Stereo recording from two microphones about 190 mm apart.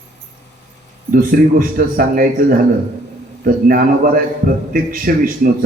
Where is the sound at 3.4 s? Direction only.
50° right (ahead or behind).